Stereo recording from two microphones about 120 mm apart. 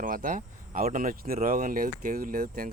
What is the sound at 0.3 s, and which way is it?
Speech, 90° right.